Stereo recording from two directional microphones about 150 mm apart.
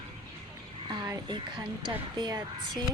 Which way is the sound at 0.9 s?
30° right (ahead or behind).